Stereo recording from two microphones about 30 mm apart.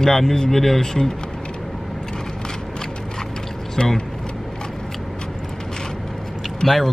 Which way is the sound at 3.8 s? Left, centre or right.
Left.